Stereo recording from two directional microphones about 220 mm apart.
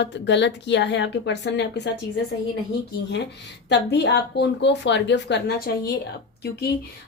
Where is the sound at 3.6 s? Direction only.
50° left (ahead or behind).